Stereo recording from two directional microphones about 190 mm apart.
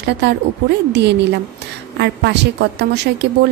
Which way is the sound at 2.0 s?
65° right (ahead or behind).